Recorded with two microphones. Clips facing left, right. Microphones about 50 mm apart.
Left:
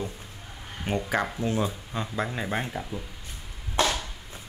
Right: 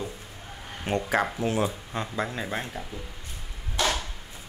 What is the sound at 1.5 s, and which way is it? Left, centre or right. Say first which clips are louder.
Speech: right 1 dB; right.